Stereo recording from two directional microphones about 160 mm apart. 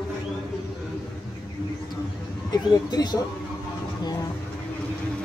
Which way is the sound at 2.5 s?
25° left (ahead or behind).